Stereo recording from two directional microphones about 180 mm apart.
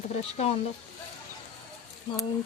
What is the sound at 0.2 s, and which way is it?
Speech, 35° left (ahead or behind).